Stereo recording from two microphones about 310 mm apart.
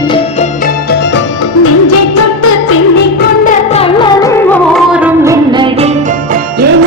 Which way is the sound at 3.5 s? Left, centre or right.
Centre.